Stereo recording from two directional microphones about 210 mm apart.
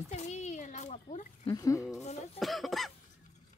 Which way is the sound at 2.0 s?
30° left (ahead or behind).